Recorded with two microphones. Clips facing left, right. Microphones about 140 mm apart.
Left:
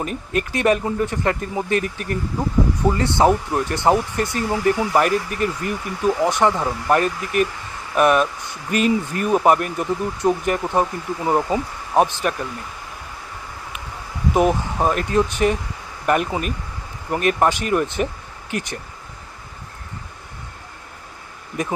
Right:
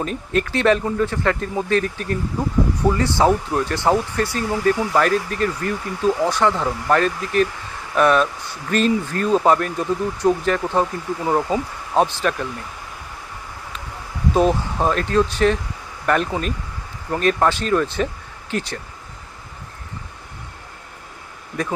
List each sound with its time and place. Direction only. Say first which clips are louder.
0.0 s speech: right 2 dB; 10° left (ahead or behind)
14.3 s speech: even; 15° left (ahead or behind)